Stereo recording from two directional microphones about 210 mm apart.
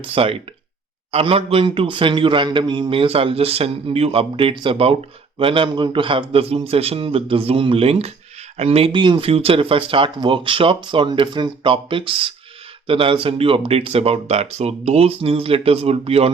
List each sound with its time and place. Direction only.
0.0 s a man's voice: 25° right (ahead or behind)